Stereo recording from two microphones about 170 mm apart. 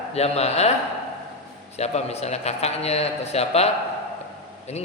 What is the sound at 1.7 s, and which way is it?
A man's voice, 40° left (ahead or behind).